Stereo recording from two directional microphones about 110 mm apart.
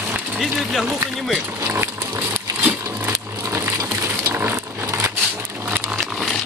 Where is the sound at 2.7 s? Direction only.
20° right (ahead or behind).